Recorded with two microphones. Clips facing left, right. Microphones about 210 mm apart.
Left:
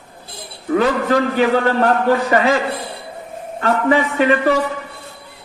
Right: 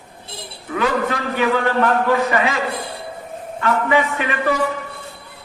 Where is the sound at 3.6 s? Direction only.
35° left (ahead or behind).